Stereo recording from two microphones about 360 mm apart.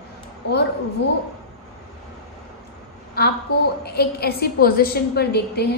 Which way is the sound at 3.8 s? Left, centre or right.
Left.